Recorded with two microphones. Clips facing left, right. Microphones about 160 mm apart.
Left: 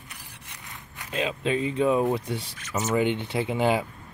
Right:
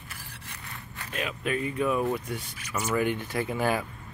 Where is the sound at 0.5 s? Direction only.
20° left (ahead or behind).